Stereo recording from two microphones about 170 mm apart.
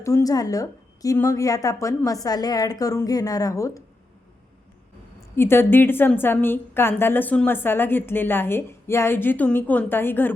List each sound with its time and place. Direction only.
0.0 s a woman's voice: 20° left (ahead or behind)
5.4 s a woman's voice: 15° left (ahead or behind)